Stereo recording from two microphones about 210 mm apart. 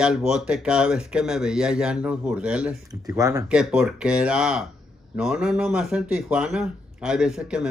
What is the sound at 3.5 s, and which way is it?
Speech, 5° right (ahead or behind).